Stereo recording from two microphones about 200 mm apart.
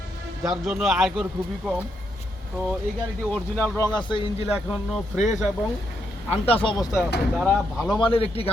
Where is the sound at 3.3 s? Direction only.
10° left (ahead or behind); by 4.2 s 25° left (ahead or behind).